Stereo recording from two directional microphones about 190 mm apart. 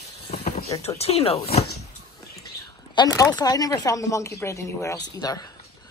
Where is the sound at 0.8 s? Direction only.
35° left (ahead or behind).